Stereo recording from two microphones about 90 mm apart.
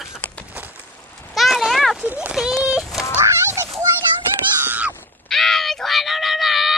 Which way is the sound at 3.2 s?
30° right (ahead or behind).